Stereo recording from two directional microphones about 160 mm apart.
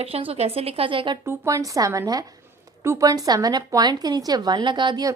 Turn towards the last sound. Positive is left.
turn(degrees=-25)  # may be behind; listen again after turning